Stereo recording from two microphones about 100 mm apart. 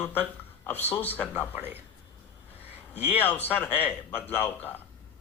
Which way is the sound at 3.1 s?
20° left (ahead or behind).